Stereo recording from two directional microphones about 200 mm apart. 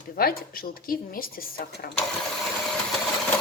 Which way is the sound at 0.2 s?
45° left (ahead or behind).